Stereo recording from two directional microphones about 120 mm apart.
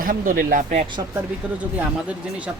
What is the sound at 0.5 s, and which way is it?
Speech, 90° right.